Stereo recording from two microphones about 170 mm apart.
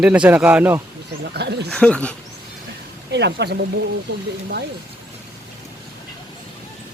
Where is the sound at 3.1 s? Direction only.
90° right.